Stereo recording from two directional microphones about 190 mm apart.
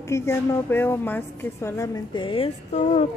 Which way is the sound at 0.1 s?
15° left (ahead or behind).